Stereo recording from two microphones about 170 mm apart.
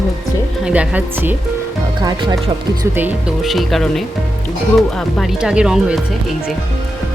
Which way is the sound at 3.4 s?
Centre (ahead or behind).